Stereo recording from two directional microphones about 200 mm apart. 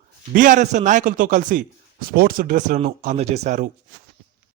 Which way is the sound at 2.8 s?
30° right (ahead or behind).